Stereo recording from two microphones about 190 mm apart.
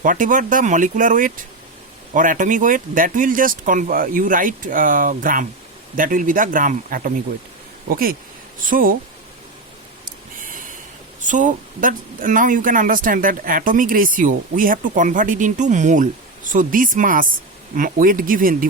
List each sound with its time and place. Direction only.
0.0 s speech: 45° right (ahead or behind)
11.3 s speech: 40° right (ahead or behind)